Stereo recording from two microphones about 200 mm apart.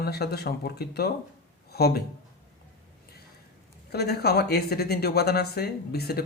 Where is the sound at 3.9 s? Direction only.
55° left (ahead or behind).